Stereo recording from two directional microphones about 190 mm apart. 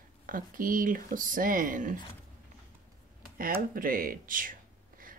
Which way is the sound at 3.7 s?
50° right (ahead or behind).